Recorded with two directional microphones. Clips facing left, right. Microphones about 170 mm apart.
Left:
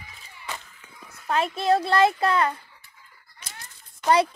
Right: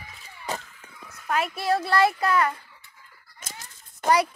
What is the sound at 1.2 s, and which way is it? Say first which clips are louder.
Speech: left 2 dB; 25° left (ahead or behind).